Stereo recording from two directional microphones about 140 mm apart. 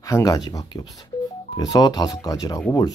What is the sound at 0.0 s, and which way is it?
Speech, 25° left (ahead or behind).